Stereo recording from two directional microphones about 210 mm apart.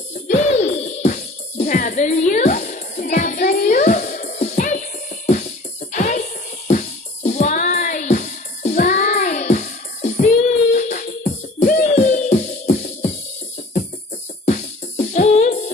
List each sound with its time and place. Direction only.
0.1 s music: 30° left (ahead or behind)
14.4 s music: 35° left (ahead or behind)